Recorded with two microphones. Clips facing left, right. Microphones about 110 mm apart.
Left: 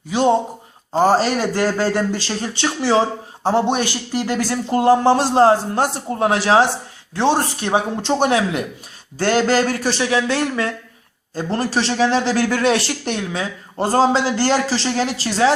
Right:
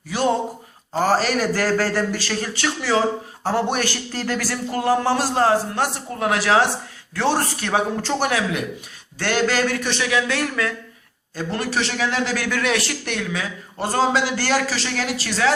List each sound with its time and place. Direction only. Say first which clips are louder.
0.1 s a man's voice: left 4 dB; 20° left (ahead or behind)